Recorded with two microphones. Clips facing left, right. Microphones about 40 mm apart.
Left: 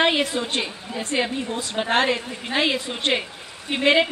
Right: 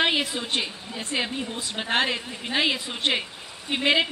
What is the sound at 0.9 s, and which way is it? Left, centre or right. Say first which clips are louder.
A woman's voice: left 5 dB; centre.